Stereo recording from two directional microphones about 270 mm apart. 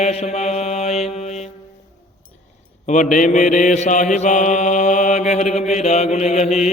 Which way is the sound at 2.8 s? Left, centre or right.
Left.